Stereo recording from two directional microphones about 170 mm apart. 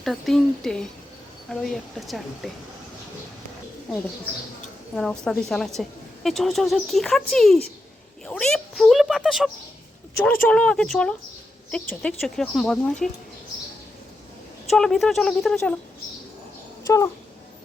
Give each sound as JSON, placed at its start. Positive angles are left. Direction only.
{"t": 0.0, "sound": "speech", "side_deg": 0}
{"t": 4.9, "sound": "speech", "side_deg": 5}
{"t": 10.5, "sound": "speech", "side_deg": 5}
{"t": 14.7, "sound": "speech", "side_deg": 0}
{"t": 16.8, "sound": "speech", "side_deg": 20}